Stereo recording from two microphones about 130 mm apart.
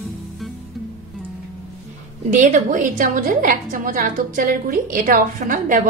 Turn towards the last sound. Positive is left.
turn(degrees=-90)